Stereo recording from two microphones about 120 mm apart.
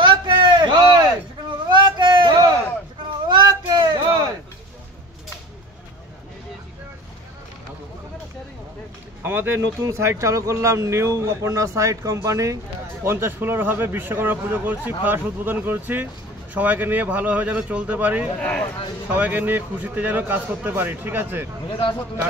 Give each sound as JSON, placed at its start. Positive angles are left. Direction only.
{"t": 0.0, "sound": "a sound", "side_deg": -40}
{"t": 9.2, "sound": "a man's voice", "side_deg": -20}
{"t": 21.6, "sound": "speech", "side_deg": 45}